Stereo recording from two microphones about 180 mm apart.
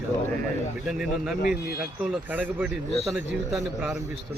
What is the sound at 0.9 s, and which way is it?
Speech, centre (ahead or behind).